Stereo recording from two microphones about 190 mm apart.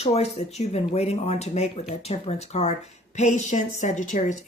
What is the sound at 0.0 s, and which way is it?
Speech, 35° left (ahead or behind).